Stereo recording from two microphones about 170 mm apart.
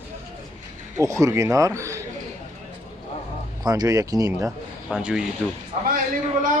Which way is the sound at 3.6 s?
20° right (ahead or behind).